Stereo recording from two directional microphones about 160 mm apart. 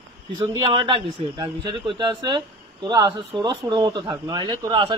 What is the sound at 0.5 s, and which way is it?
Speech, 30° right (ahead or behind).